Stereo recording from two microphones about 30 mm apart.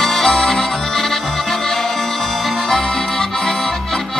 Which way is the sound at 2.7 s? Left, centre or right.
Centre.